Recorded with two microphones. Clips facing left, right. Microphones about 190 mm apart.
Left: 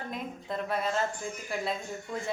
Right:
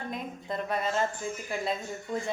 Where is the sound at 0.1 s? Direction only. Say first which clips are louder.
Right 1 dB; centre (ahead or behind).